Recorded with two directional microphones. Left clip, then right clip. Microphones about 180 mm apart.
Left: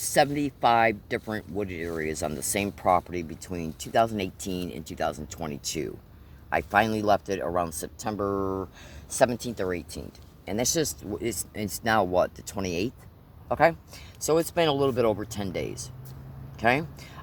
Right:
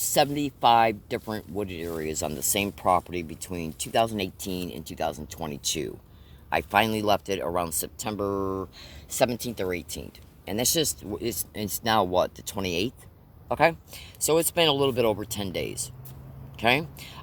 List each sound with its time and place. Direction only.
0.3 s speech: 30° right (ahead or behind)
1.5 s speech: 40° right (ahead or behind)